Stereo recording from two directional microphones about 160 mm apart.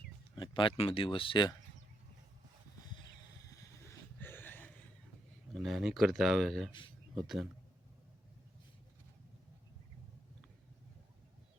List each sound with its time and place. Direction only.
0.3 s speech: 30° left (ahead or behind)
3.8 s a sound: 15° left (ahead or behind)
5.5 s speech: centre (ahead or behind)